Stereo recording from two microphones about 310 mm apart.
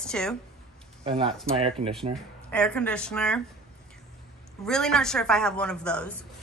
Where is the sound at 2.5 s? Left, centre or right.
Centre.